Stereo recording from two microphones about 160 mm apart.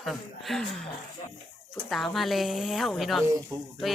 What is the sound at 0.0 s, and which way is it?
Speech, centre (ahead or behind).